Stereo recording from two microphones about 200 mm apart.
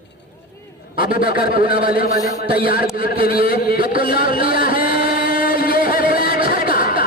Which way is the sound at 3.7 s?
45° left (ahead or behind).